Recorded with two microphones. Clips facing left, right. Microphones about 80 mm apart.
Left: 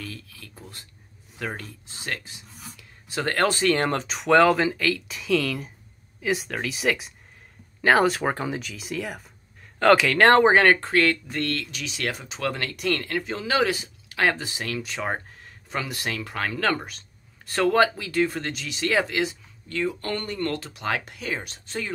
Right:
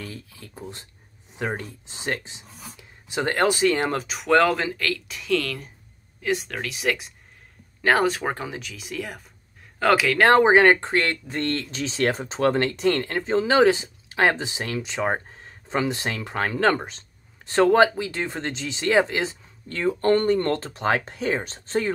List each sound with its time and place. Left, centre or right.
0.0 s speech: right